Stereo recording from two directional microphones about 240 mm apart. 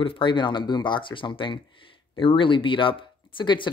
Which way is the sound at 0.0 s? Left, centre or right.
Left.